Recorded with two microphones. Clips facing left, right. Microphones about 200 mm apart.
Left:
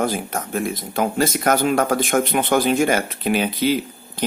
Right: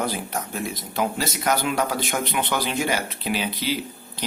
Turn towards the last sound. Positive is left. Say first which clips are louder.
# left 7 dB
turn(degrees=50)  # may be behind; listen again after turning